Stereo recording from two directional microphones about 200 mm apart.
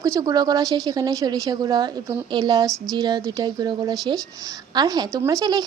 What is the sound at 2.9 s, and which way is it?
Speech, 20° right (ahead or behind).